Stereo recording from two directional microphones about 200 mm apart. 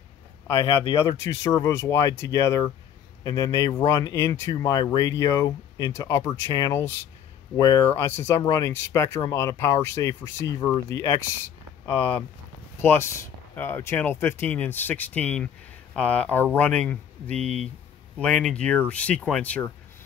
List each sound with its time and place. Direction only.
0.5 s speech: 15° left (ahead or behind)
17.4 s speech: 35° right (ahead or behind)
18.2 s speech: 5° left (ahead or behind)